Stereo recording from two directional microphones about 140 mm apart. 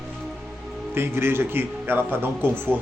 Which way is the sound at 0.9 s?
15° right (ahead or behind).